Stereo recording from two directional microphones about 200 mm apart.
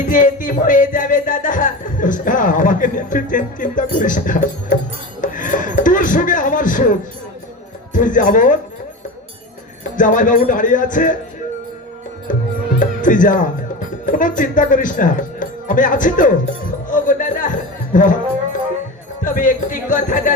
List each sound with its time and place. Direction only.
0.1 s music: 40° left (ahead or behind)
5.2 s speech: 40° left (ahead or behind)
7.9 s music: 40° left (ahead or behind)
10.0 s music: 40° left (ahead or behind)
12.3 s music: 40° left (ahead or behind)
12.8 s speech: 40° left (ahead or behind)
14.0 s music: 40° left (ahead or behind)
19.2 s music: 40° left (ahead or behind)